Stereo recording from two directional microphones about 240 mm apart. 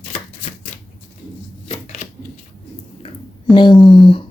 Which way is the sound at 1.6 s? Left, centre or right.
Left.